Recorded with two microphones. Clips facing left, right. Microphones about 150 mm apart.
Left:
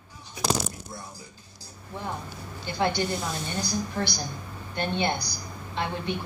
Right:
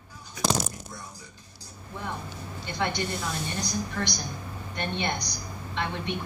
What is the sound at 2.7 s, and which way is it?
A woman's voice, 30° left (ahead or behind).